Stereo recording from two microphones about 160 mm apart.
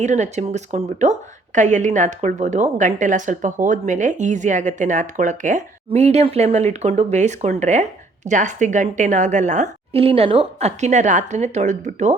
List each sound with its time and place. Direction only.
0.0 s a woman's voice: 45° right (ahead or behind)
9.9 s a woman's voice: 35° right (ahead or behind)